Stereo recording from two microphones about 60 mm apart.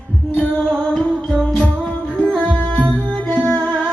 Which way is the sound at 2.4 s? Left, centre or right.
Centre.